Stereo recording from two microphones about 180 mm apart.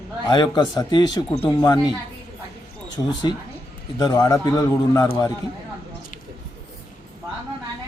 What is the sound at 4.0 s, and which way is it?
Speech, 20° left (ahead or behind).